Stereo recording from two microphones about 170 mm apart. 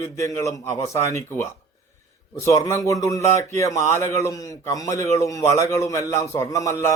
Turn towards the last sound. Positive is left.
turn(degrees=20)  # may be behind; listen again after turning